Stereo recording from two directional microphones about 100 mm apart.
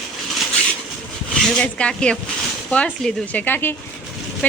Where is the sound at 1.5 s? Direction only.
10° left (ahead or behind).